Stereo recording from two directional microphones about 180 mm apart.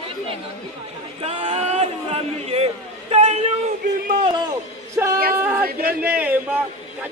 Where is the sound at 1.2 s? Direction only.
30° right (ahead or behind).